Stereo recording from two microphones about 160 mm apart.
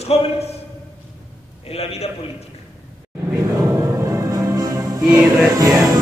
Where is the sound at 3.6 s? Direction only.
20° right (ahead or behind).